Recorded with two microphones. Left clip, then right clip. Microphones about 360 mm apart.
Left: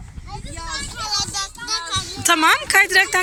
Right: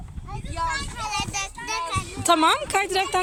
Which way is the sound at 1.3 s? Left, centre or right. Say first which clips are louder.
Left 3 dB; right.